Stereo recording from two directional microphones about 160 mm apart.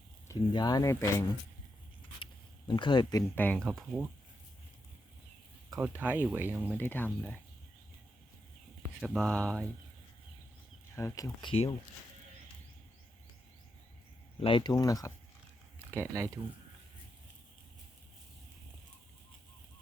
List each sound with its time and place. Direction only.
0.3 s speech: 25° left (ahead or behind)
2.1 s zipper: 30° left (ahead or behind)
3.3 s speech: 10° left (ahead or behind)
3.6 s speech: centre (ahead or behind)
5.7 s speech: 10° right (ahead or behind)
6.7 s speech: 10° left (ahead or behind)
9.0 s speech: 5° left (ahead or behind)
10.9 s speech: 20° left (ahead or behind)
14.4 s speech: 30° left (ahead or behind)
15.9 s speech: 15° right (ahead or behind)